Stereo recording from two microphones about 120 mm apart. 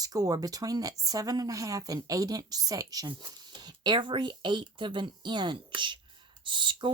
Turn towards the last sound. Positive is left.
turn(degrees=-40)  # may be behind; listen again after turning